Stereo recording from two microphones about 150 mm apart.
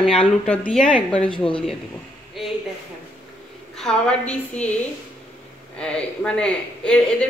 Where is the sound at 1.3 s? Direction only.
35° left (ahead or behind).